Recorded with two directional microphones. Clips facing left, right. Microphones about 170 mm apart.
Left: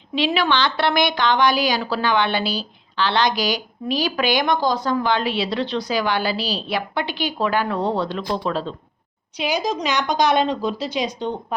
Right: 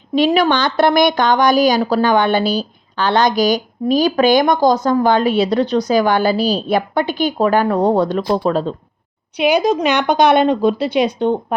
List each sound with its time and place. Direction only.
0.1 s a woman's voice: 40° right (ahead or behind)
9.4 s speech: 60° right (ahead or behind)